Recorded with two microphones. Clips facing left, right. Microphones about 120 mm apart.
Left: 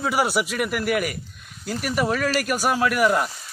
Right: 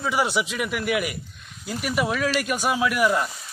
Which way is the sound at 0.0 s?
5° left (ahead or behind).